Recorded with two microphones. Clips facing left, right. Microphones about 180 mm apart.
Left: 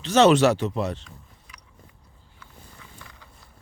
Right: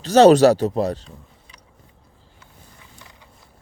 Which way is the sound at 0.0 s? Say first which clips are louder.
Right 6 dB; 35° right (ahead or behind).